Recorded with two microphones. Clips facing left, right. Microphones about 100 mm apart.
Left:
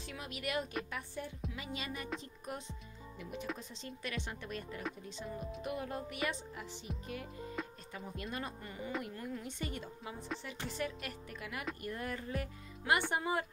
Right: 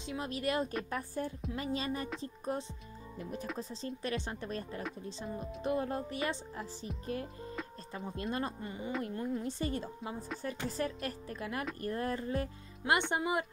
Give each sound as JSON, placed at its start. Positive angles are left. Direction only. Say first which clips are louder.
{"t": 0.2, "sound": "a woman's voice", "louder": "right 5 dB", "side_deg": -35}
{"t": 7.6, "sound": "music", "louder": "left 1 dB", "side_deg": 0}
{"t": 7.9, "sound": "speech", "louder": "right 7 dB", "side_deg": -30}
{"t": 13.1, "sound": "a woman's voice", "louder": "right 2 dB", "side_deg": -20}